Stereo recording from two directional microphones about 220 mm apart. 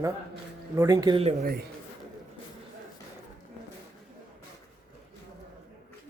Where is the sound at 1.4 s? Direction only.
45° right (ahead or behind).